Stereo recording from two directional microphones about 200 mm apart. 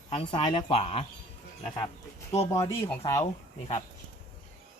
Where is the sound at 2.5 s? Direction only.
15° left (ahead or behind).